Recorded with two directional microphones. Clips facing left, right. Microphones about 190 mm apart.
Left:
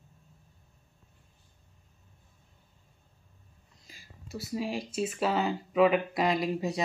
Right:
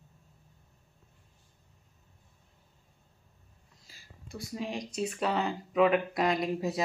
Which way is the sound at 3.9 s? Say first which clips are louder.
Left 5 dB; 15° left (ahead or behind).